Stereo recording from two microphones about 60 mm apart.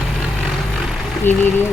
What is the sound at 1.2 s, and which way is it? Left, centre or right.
Speech, left.